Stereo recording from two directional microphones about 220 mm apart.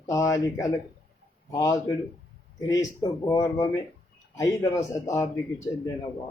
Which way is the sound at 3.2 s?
15° left (ahead or behind).